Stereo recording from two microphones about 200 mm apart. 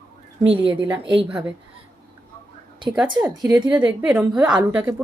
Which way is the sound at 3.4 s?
20° right (ahead or behind).